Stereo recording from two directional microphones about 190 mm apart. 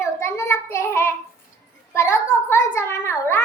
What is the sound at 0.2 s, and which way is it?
Child singing, 15° left (ahead or behind).